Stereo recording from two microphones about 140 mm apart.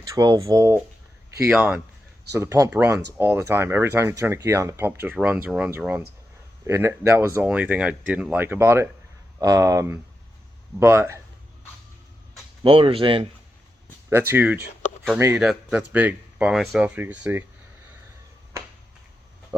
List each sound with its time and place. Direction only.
0.0 s speech: 25° right (ahead or behind)
1.5 s speech: 10° right (ahead or behind)
2.3 s speech: 20° right (ahead or behind)
12.6 s speech: 40° right (ahead or behind)
14.1 s speech: 15° right (ahead or behind)